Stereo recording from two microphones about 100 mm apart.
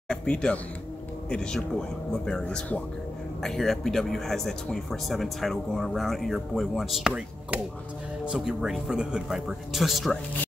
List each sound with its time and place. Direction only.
0.1 s speech: 10° left (ahead or behind)